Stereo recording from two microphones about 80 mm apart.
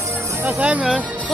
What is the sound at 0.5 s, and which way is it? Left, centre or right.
Music, centre.